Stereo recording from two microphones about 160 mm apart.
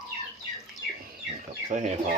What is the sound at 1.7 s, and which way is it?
Bird, 45° right (ahead or behind).